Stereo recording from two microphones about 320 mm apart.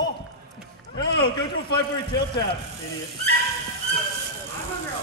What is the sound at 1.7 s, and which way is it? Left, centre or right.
Speech, left.